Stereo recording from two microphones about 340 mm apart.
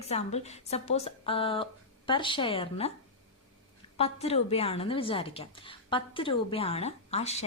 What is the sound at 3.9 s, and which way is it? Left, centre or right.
A woman's voice, centre.